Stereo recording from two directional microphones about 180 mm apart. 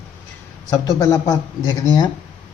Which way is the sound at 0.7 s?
20° left (ahead or behind).